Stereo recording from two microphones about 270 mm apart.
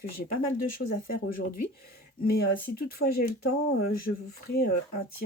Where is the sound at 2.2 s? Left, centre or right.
Left.